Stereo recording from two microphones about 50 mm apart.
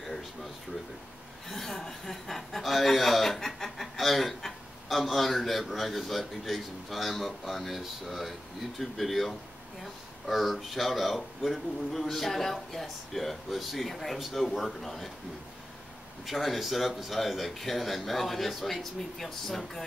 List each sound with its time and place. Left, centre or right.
0.0 s a sound: centre
1.5 s speech: centre
16.3 s speech: centre